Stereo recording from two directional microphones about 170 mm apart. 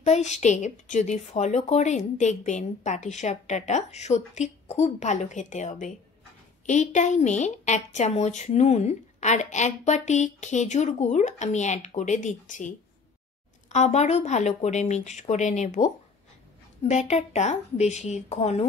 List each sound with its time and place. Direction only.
0.0 s a woman's voice: 45° left (ahead or behind)